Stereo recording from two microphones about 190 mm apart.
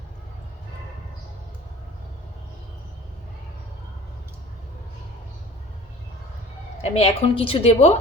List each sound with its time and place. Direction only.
6.9 s a woman's voice: 30° left (ahead or behind)